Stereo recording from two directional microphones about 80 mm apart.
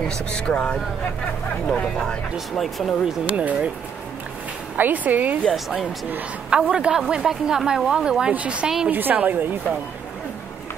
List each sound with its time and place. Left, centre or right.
0.0 s speech: centre
3.3 s a woman's voice: centre
4.7 s speech: right
5.5 s a woman's voice: centre
8.9 s speech: right